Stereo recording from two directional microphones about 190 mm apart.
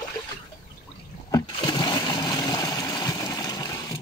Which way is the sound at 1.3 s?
20° left (ahead or behind).